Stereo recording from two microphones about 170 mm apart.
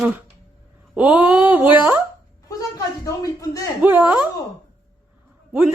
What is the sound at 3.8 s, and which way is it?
Speech, 10° right (ahead or behind).